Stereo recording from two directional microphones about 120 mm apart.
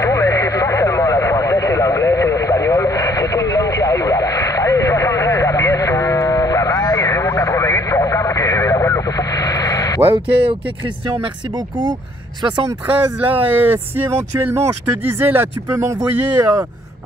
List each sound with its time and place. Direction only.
0.0 s radio: 25° left (ahead or behind)
12.8 s speech: 15° right (ahead or behind)